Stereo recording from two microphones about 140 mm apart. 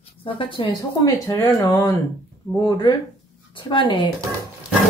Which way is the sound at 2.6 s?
30° left (ahead or behind).